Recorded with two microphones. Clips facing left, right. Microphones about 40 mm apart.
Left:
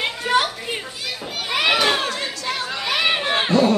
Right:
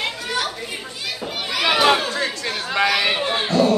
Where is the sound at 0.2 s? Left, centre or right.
Left.